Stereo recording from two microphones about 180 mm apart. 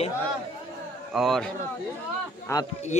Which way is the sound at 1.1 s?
Centre (ahead or behind).